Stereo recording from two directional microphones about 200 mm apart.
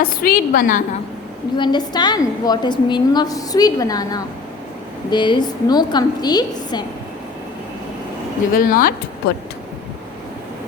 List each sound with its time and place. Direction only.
0.0 s a woman's voice: 45° left (ahead or behind)
1.5 s a woman's voice: 20° left (ahead or behind)
8.5 s a woman's voice: 45° left (ahead or behind)